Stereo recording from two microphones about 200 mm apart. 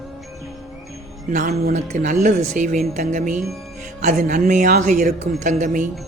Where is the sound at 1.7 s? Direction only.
40° right (ahead or behind).